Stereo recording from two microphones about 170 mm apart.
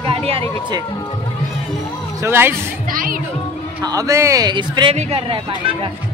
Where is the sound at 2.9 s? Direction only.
55° right (ahead or behind).